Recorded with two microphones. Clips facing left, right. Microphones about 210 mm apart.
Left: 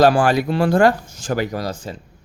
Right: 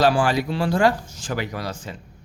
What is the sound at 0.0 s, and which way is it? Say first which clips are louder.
Speech: left 4 dB; 50° left (ahead or behind).